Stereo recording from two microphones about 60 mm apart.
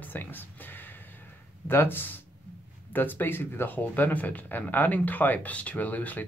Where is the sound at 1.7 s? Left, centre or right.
Left.